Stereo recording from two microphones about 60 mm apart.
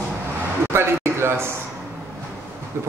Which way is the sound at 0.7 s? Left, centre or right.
Right.